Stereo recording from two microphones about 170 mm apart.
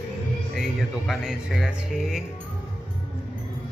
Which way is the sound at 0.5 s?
Centre (ahead or behind).